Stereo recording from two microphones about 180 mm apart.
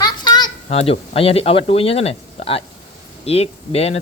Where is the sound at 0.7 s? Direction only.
35° left (ahead or behind).